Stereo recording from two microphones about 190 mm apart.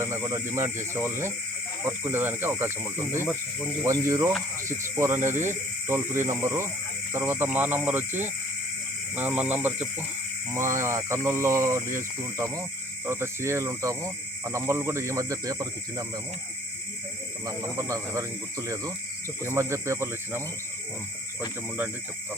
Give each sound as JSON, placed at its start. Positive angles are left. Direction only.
{"t": 0.0, "sound": "speech", "side_deg": -15}
{"t": 3.2, "sound": "speech", "side_deg": 5}
{"t": 3.8, "sound": "speech", "side_deg": -15}
{"t": 17.4, "sound": "speech", "side_deg": -15}